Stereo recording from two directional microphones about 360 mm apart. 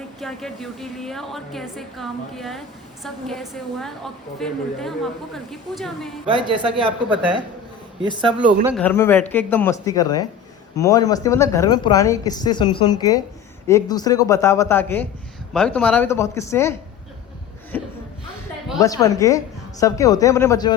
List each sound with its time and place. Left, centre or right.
0.2 s a woman's voice: centre
6.3 s speech: centre
7.1 s a woman's voice: centre
8.2 s speech: right
8.6 s a woman's voice: centre
17.7 s speech: centre